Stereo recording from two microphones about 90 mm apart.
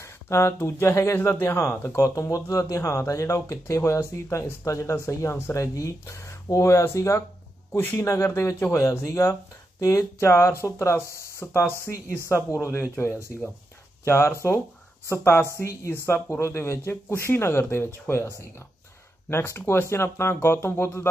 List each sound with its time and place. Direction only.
0.0 s speech: 30° left (ahead or behind)
7.7 s speech: 20° left (ahead or behind)
14.0 s speech: 30° left (ahead or behind)